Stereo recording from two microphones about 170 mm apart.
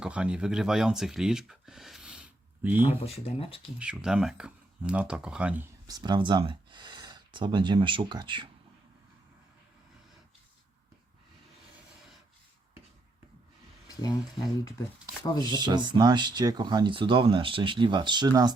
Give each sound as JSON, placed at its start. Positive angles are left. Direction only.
{"t": 0.0, "sound": "speech", "side_deg": -5}
{"t": 3.2, "sound": "speech", "side_deg": 35}
{"t": 3.8, "sound": "speech", "side_deg": -5}
{"t": 5.9, "sound": "speech", "side_deg": -25}
{"t": 13.8, "sound": "a sound", "side_deg": 20}
{"t": 15.2, "sound": "speech", "side_deg": 25}
{"t": 15.5, "sound": "speech", "side_deg": -25}